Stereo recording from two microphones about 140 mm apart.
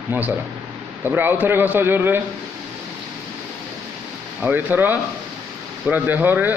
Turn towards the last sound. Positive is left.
turn(degrees=-10)  # may be behind; listen again after turning